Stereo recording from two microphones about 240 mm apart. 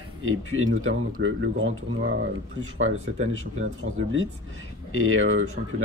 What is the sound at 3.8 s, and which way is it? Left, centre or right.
Speech, right.